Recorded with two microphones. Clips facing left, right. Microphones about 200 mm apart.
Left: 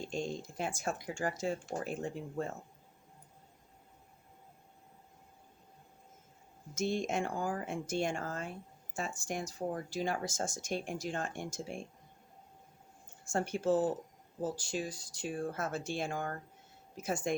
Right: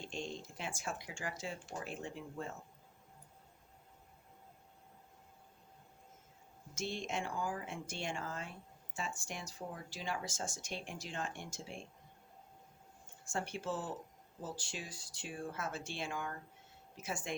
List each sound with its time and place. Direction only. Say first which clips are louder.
0.0 s a sound: left 6 dB; 40° left (ahead or behind)
0.8 s speech: left 7 dB; 45° left (ahead or behind)
6.7 s speech: left 7 dB; 45° left (ahead or behind)
13.3 s speech: left 9 dB; 45° left (ahead or behind)